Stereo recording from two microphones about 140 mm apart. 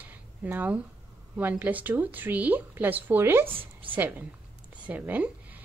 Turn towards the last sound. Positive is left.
turn(degrees=-10)  # may be behind; listen again after turning